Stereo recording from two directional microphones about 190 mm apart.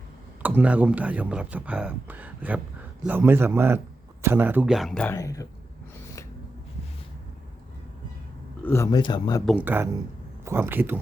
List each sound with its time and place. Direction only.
0.4 s speech: 10° right (ahead or behind)
5.1 s speech: 15° left (ahead or behind)
8.6 s speech: 15° left (ahead or behind)
9.5 s speech: 10° right (ahead or behind)